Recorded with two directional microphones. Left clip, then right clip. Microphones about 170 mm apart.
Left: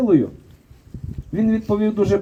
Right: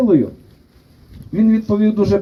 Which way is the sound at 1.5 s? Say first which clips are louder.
Right 3 dB; 15° right (ahead or behind).